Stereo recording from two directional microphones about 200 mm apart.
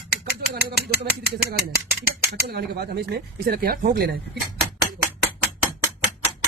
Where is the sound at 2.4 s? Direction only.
55° right (ahead or behind).